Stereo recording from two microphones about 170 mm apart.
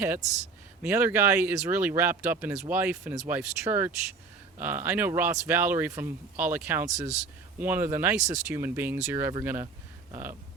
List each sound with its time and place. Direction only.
0.8 s speech: 10° right (ahead or behind)